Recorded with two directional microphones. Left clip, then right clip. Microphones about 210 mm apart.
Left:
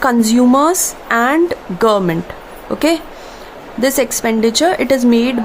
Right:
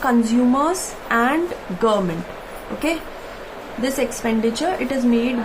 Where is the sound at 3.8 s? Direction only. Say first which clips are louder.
Left 8 dB; 50° left (ahead or behind).